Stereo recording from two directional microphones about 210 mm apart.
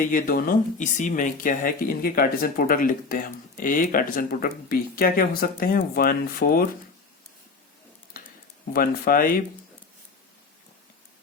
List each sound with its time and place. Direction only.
0.1 s speech: 40° left (ahead or behind)
8.7 s speech: 45° left (ahead or behind)